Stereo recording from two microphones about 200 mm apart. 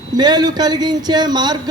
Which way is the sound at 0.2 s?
20° right (ahead or behind).